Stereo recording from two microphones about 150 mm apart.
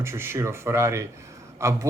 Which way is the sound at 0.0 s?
15° right (ahead or behind).